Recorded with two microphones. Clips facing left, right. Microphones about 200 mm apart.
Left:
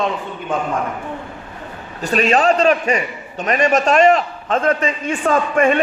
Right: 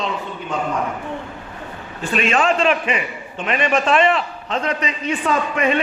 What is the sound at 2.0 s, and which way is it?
A man's voice, 40° left (ahead or behind).